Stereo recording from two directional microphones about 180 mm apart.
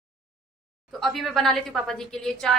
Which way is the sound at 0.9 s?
Centre (ahead or behind).